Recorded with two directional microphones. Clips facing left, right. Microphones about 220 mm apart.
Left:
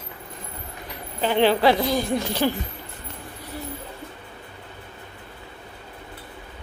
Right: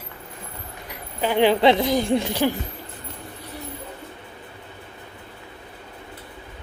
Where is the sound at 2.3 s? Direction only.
15° right (ahead or behind).